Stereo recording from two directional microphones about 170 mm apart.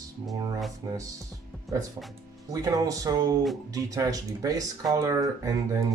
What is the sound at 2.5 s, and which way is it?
Speech, 20° right (ahead or behind).